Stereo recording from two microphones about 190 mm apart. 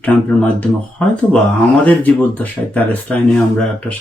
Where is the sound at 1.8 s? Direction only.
5° left (ahead or behind).